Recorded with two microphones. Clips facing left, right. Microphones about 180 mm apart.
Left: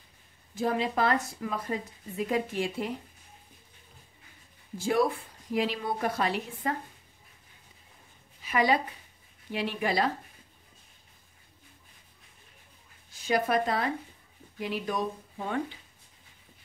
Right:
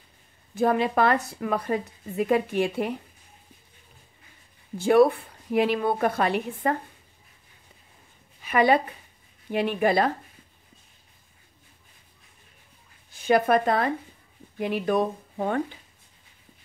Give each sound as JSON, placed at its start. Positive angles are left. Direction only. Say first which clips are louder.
{"t": 0.6, "sound": "a woman's voice", "louder": "right 6 dB", "side_deg": -60}
{"t": 4.7, "sound": "a woman's voice", "louder": "right 8 dB", "side_deg": -60}
{"t": 8.4, "sound": "a woman's voice", "louder": "right 5 dB", "side_deg": -60}
{"t": 13.1, "sound": "a woman's voice", "louder": "right 6 dB", "side_deg": -60}